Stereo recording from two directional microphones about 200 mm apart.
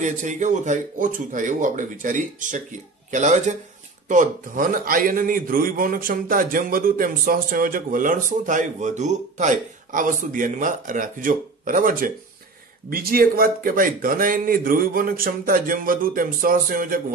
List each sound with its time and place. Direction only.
0.0 s a man's voice: 40° right (ahead or behind)